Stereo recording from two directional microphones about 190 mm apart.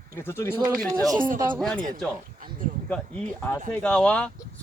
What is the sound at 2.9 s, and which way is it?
Speech, 5° left (ahead or behind).